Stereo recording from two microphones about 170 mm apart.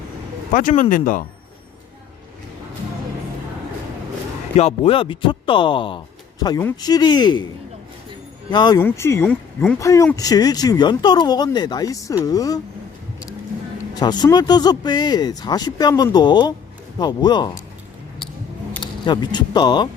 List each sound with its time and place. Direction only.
0.5 s speech: 50° left (ahead or behind)
4.5 s speech: 35° left (ahead or behind)
8.4 s speech: 25° left (ahead or behind)
8.8 s speech: 15° left (ahead or behind)
9.7 s speech: 20° left (ahead or behind)
14.0 s speech: 25° left (ahead or behind)
18.8 s speech: 25° left (ahead or behind)